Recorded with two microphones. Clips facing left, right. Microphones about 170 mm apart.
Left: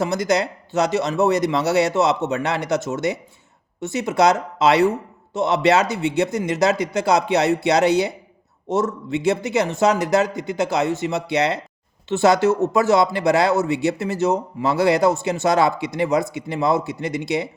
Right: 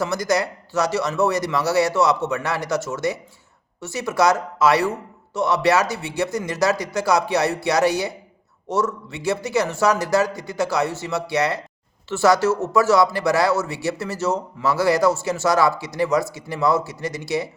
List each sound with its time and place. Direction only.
0.0 s speech: 20° left (ahead or behind)